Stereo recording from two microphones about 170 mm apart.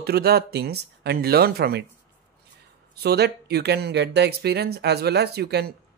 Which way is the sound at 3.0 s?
70° right (ahead or behind).